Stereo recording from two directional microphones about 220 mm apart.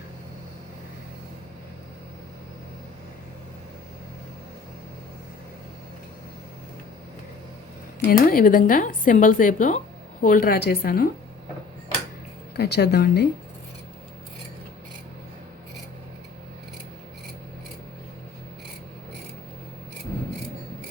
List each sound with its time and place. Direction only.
8.1 s a woman's voice: 40° left (ahead or behind)
12.5 s speech: 50° left (ahead or behind)